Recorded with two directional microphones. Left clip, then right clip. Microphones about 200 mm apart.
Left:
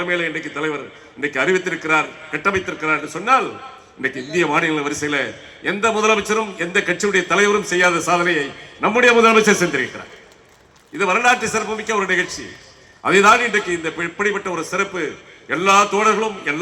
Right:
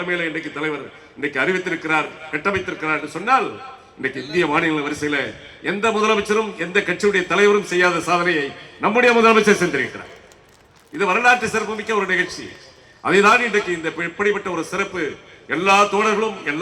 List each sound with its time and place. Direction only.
0.0 s a man's voice: 25° left (ahead or behind)
10.9 s a man's voice: 25° left (ahead or behind)